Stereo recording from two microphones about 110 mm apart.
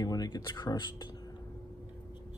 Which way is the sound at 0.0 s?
35° left (ahead or behind).